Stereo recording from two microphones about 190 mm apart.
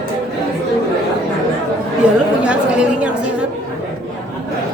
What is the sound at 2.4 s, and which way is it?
Speech, 5° right (ahead or behind).